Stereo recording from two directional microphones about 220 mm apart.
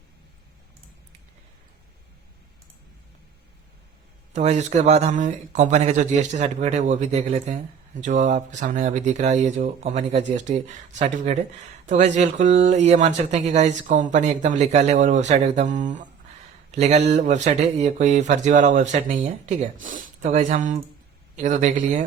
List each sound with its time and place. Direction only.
4.3 s speech: 30° right (ahead or behind)